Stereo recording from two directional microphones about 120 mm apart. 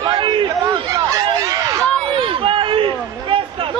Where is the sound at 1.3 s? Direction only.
25° right (ahead or behind).